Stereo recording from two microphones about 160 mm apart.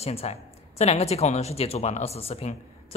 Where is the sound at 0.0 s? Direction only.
40° left (ahead or behind).